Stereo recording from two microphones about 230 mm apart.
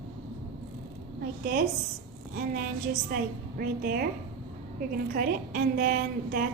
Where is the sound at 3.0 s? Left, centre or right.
Right.